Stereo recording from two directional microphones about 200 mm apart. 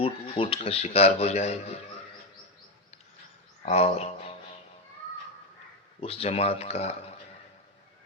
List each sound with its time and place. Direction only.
0.0 s a man's voice: 30° left (ahead or behind)
3.7 s speech: 30° left (ahead or behind)
6.0 s a man's voice: 30° left (ahead or behind)